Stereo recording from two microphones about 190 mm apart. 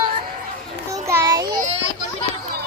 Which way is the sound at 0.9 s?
15° right (ahead or behind).